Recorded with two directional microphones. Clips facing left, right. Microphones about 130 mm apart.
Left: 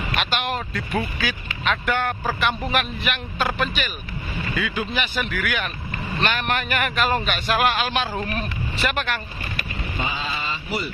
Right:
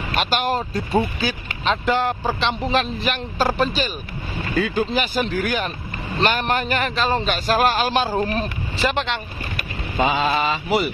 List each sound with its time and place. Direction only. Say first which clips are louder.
0.1 s speech: right 5 dB; 40° right (ahead or behind)
10.0 s mantra: right 11 dB; 75° right (ahead or behind)